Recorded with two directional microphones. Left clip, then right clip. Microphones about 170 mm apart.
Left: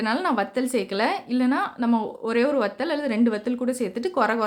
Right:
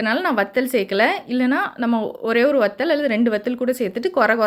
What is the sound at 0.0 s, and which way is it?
A woman's voice, 15° right (ahead or behind).